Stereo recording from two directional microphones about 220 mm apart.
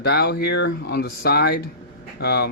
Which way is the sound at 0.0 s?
45° left (ahead or behind).